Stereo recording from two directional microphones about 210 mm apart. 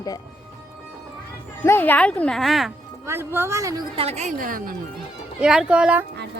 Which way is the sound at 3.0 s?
10° right (ahead or behind).